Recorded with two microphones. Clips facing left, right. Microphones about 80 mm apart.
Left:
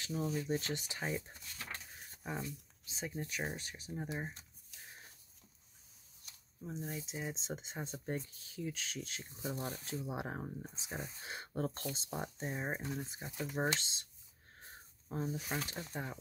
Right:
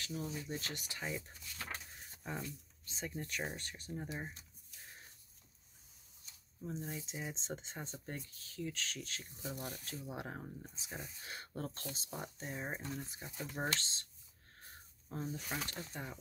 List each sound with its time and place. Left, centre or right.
0.3 s speech: left
6.6 s speech: centre; by 10.0 s left
10.0 s speech: centre
14.6 s a sound: centre